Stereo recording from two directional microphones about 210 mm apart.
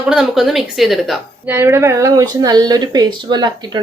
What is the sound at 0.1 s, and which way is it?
A woman's voice, centre (ahead or behind).